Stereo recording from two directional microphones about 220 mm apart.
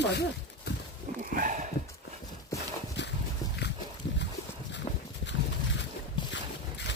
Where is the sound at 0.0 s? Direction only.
50° left (ahead or behind).